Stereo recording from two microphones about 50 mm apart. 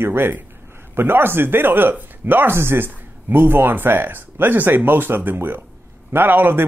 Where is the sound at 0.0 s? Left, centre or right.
Right.